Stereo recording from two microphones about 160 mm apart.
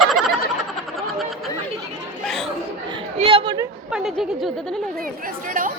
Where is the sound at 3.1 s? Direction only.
35° right (ahead or behind).